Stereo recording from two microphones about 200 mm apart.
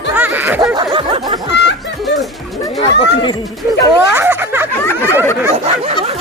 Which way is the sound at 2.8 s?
30° left (ahead or behind).